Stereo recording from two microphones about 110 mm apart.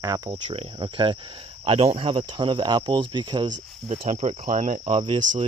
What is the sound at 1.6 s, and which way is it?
Speech, 65° right (ahead or behind).